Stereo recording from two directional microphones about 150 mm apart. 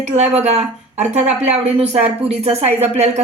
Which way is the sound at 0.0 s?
50° right (ahead or behind).